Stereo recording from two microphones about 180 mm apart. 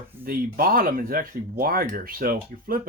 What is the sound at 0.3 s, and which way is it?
Speech, 55° right (ahead or behind).